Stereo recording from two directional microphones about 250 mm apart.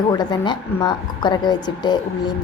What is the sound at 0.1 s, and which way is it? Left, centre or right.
A woman's voice, centre.